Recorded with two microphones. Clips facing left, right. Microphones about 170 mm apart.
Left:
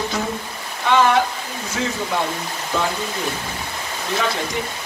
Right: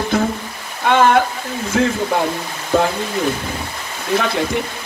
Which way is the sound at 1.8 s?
60° right (ahead or behind).